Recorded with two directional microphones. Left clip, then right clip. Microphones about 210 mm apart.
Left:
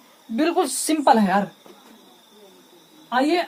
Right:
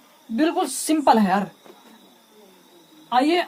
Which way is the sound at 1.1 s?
10° left (ahead or behind).